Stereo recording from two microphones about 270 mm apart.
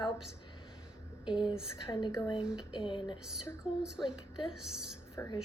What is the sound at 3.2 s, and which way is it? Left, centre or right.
A woman's voice, centre.